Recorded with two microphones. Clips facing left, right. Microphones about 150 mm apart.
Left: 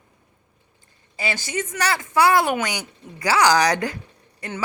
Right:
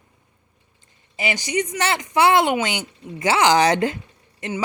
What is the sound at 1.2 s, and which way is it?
Speech, 15° right (ahead or behind).